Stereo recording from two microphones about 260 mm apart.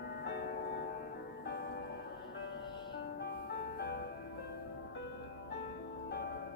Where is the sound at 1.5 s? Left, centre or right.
Left.